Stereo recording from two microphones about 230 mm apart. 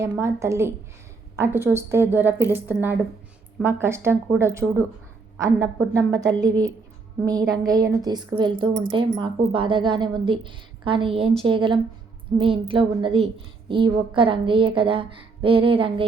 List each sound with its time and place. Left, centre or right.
0.0 s speech: centre
7.3 s a woman's voice: centre